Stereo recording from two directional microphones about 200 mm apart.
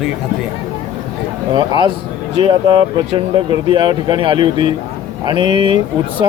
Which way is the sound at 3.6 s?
25° right (ahead or behind).